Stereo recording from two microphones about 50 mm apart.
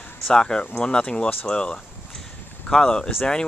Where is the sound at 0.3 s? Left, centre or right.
Centre.